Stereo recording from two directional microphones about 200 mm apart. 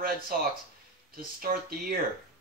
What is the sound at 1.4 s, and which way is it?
Speech, 45° right (ahead or behind).